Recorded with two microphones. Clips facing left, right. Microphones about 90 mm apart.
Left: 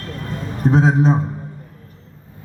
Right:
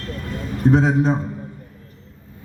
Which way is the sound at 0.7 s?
25° left (ahead or behind).